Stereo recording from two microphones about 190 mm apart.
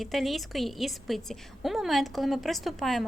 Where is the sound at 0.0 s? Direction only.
Centre (ahead or behind).